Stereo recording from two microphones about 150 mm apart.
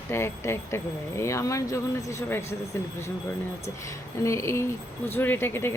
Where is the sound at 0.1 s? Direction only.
15° left (ahead or behind).